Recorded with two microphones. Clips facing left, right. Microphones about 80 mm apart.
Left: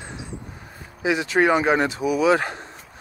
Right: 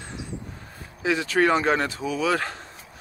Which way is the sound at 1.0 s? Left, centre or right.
Centre.